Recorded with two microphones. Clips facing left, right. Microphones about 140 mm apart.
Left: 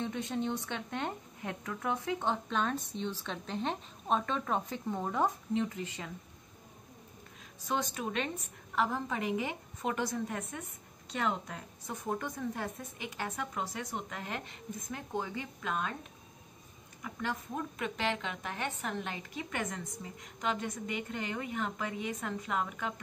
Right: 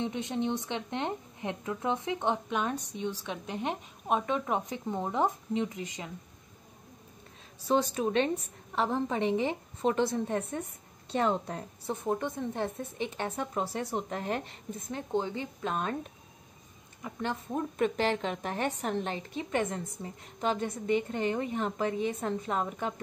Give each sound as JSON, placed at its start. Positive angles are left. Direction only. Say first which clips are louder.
{"t": 0.0, "sound": "a woman's voice", "louder": "right 3 dB", "side_deg": -20}
{"t": 7.6, "sound": "a woman's voice", "louder": "right 7 dB", "side_deg": -30}
{"t": 17.0, "sound": "a woman's voice", "louder": "right 3 dB", "side_deg": -25}